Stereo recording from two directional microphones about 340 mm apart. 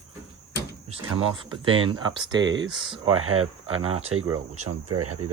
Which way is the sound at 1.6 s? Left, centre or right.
Centre.